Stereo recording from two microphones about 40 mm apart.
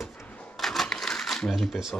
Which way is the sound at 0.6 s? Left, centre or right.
Centre.